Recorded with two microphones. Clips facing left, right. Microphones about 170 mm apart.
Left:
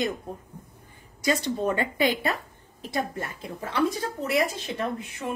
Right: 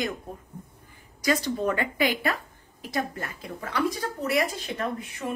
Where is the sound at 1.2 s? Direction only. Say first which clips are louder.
Even; 25° left (ahead or behind).